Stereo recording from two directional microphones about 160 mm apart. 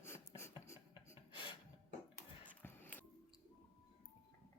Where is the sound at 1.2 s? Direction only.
30° left (ahead or behind).